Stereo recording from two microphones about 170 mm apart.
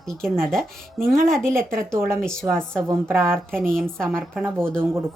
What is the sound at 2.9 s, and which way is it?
Speech, 15° right (ahead or behind).